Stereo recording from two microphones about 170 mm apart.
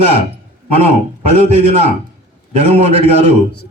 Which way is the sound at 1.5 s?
40° right (ahead or behind).